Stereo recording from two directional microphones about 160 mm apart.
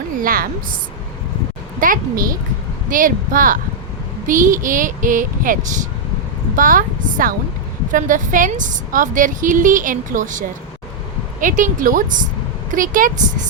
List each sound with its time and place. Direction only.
0.2 s a woman's voice: 65° right (ahead or behind)
1.8 s a woman's voice: 60° right (ahead or behind)